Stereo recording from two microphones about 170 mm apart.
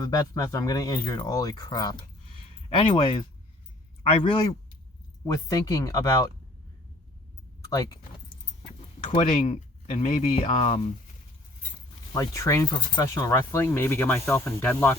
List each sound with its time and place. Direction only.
0.0 s speech: 20° left (ahead or behind)
7.7 s speech: 20° left (ahead or behind)
9.0 s speech: 40° left (ahead or behind)
12.1 s speech: 20° left (ahead or behind)